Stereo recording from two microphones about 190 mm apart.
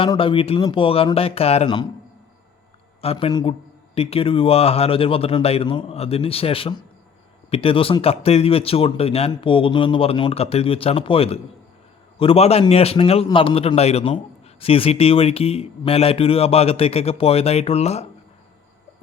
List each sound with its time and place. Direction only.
0.0 s speech: 25° left (ahead or behind)
3.0 s speech: 30° left (ahead or behind)